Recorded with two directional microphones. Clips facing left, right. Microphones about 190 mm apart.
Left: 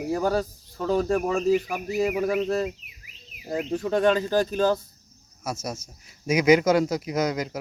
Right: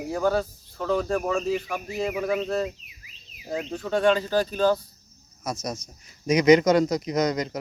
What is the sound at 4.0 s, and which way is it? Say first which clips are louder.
Speech: even; 45° left (ahead or behind).